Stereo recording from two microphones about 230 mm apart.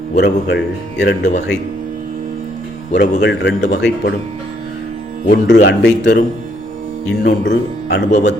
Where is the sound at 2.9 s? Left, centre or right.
Left.